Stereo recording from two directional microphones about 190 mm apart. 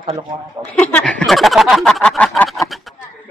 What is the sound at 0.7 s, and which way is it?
Speech, 5° left (ahead or behind).